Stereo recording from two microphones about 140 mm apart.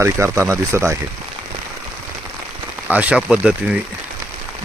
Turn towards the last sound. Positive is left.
turn(degrees=-10)  # may be behind; listen again after turning